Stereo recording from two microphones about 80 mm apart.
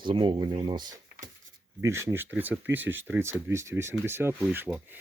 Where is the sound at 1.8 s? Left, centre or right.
Right.